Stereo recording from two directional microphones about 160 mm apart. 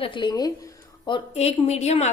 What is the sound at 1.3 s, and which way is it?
Speech, 40° left (ahead or behind).